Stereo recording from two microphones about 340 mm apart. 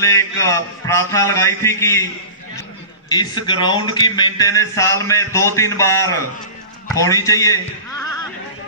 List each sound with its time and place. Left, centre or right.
0.0 s a man's voice: centre
3.1 s a man's voice: centre